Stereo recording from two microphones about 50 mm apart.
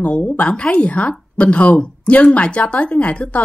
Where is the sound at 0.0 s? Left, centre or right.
Left.